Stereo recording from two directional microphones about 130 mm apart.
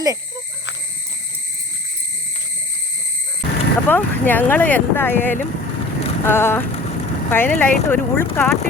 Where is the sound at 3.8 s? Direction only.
15° left (ahead or behind).